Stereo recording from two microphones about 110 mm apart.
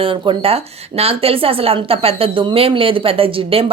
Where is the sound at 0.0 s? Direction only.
55° right (ahead or behind).